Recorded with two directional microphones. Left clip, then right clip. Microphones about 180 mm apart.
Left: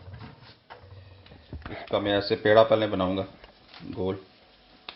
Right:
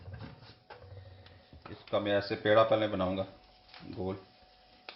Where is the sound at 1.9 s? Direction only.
45° left (ahead or behind).